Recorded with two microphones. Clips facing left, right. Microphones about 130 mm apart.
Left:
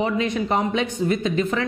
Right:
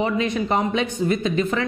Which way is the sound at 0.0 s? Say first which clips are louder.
Even; 10° right (ahead or behind).